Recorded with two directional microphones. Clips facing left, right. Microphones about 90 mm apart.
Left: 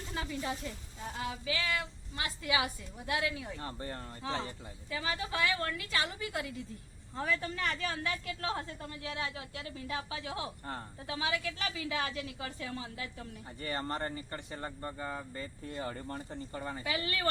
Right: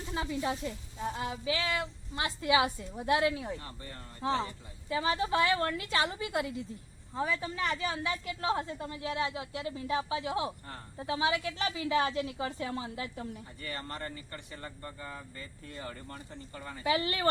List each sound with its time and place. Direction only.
0.1 s a woman's voice: 25° right (ahead or behind)
3.6 s speech: 35° left (ahead or behind)
4.2 s a woman's voice: 35° right (ahead or behind)
7.2 s a woman's voice: 15° right (ahead or behind); by 13.2 s 30° right (ahead or behind)
13.6 s speech: 30° left (ahead or behind)
16.8 s a woman's voice: 25° right (ahead or behind)